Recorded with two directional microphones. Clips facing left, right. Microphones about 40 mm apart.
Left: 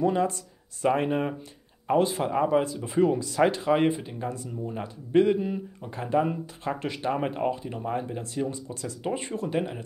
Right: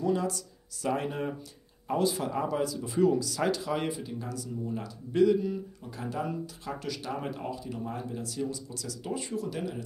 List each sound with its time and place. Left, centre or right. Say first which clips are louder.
0.0 s speech: left 4 dB; left